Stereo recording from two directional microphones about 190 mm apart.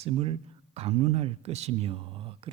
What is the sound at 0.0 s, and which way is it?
A man's voice, 30° right (ahead or behind).